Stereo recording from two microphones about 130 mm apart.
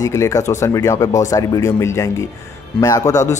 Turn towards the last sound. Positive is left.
turn(degrees=25)  # may be behind; listen again after turning